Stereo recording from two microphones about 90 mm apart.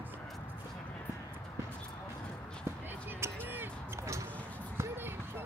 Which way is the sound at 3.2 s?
30° right (ahead or behind).